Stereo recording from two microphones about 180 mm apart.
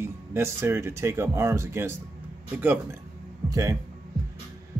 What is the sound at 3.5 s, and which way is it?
Speech, 20° right (ahead or behind).